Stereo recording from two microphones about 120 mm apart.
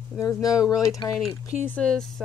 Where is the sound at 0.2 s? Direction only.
30° left (ahead or behind).